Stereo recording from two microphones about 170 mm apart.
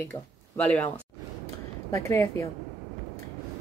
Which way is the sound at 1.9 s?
15° left (ahead or behind).